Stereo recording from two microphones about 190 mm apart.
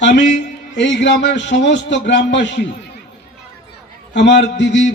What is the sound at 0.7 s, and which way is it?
A man's voice, 65° left (ahead or behind).